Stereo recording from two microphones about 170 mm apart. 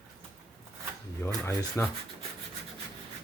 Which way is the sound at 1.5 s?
15° left (ahead or behind).